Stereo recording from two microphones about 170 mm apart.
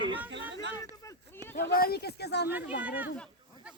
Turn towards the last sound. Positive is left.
turn(degrees=-10)  # may be behind; listen again after turning